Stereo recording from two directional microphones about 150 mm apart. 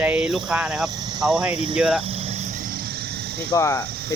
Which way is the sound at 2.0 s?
40° right (ahead or behind).